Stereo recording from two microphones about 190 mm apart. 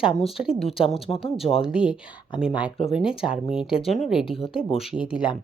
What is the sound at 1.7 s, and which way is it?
A woman's voice, 5° right (ahead or behind).